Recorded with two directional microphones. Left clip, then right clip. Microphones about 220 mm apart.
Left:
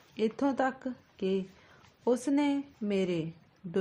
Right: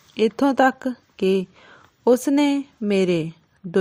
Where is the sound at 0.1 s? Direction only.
35° right (ahead or behind).